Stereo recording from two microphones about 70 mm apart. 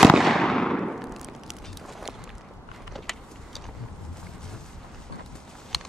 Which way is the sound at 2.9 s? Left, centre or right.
Centre.